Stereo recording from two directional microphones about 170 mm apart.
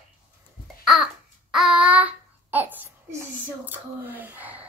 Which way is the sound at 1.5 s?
5° right (ahead or behind).